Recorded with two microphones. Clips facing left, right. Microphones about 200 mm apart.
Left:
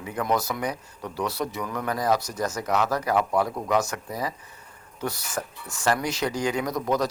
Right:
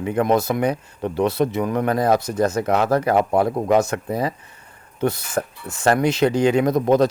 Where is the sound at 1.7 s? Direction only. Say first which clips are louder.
Right 5 dB; 60° right (ahead or behind).